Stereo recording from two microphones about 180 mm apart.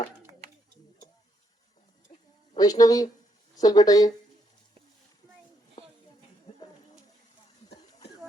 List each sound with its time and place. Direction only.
2.6 s speech: 20° left (ahead or behind)